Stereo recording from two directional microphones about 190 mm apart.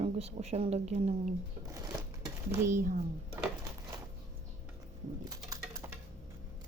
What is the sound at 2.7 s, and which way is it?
Speech, 45° right (ahead or behind).